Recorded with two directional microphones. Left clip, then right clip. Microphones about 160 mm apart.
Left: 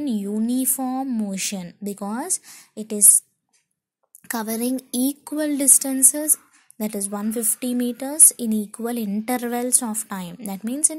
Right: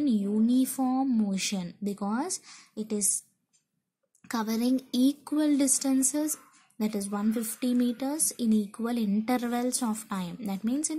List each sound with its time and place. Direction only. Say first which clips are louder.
0.0 s a woman's voice: left 2 dB; 25° left (ahead or behind)
4.3 s a woman's voice: left 3 dB; 25° left (ahead or behind)